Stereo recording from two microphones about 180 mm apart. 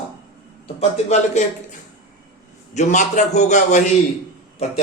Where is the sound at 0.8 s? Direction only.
35° left (ahead or behind).